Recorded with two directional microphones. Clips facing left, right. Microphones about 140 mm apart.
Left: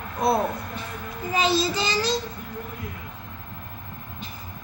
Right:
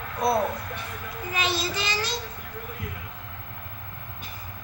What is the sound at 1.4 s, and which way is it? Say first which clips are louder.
Speech: left 6 dB; 35° left (ahead or behind).